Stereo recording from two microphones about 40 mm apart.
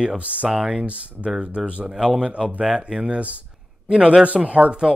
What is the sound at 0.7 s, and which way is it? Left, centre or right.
Speech, right.